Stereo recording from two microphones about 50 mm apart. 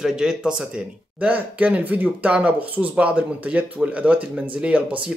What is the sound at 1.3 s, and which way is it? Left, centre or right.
Speech, right.